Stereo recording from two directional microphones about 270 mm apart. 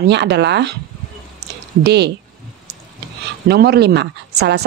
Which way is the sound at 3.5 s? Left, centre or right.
Right.